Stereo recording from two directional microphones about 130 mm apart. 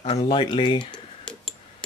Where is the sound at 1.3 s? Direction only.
10° left (ahead or behind).